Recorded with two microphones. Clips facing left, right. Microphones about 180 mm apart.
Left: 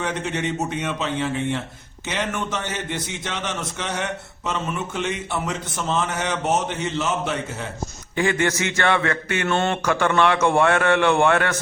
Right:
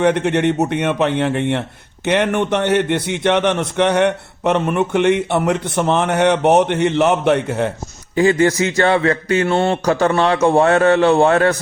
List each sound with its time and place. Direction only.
0.0 s a man's voice: 65° right (ahead or behind)
8.1 s speech: 35° right (ahead or behind)